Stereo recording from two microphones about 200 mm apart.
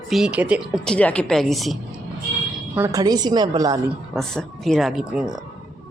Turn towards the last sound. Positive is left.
turn(degrees=-5)  # may be behind; listen again after turning